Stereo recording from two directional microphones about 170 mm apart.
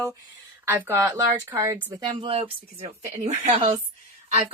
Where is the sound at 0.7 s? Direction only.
15° right (ahead or behind).